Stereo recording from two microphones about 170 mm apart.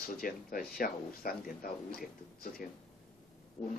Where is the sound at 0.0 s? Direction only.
60° left (ahead or behind).